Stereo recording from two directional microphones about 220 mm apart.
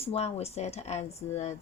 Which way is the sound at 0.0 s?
25° left (ahead or behind).